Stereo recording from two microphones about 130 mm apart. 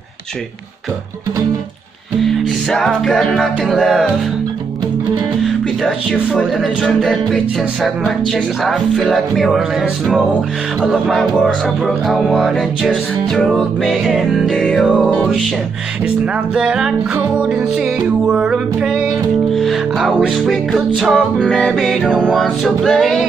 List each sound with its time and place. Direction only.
2.2 s music: 5° left (ahead or behind)
5.4 s speech: centre (ahead or behind)
8.6 s music: centre (ahead or behind)
16.5 s music: 5° right (ahead or behind)